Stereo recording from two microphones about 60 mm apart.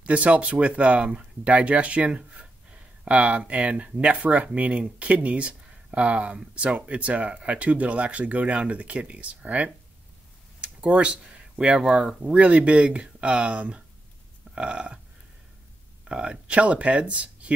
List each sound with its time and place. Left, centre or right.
0.0 s speech: right
14.5 s burping: centre
16.1 s speech: centre